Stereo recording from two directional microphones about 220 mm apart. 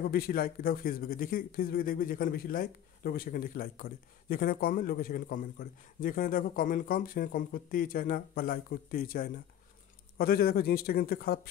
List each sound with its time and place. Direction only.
0.1 s a man's voice: 40° left (ahead or behind)